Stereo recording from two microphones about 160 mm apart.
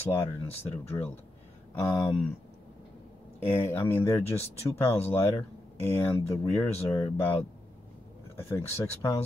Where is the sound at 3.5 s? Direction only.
10° left (ahead or behind).